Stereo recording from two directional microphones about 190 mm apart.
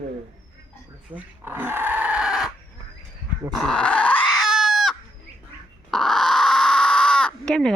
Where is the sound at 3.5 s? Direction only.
5° left (ahead or behind).